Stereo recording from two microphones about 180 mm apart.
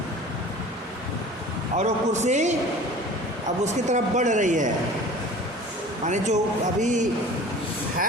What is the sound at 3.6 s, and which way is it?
Speech, 40° right (ahead or behind).